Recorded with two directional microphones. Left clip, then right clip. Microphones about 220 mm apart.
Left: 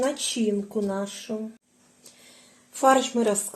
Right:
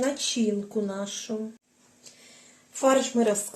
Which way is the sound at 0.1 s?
20° left (ahead or behind).